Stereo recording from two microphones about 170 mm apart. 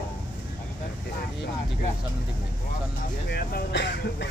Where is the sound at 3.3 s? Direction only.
75° left (ahead or behind).